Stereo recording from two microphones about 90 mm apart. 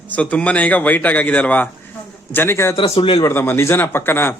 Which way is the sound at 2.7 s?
80° left.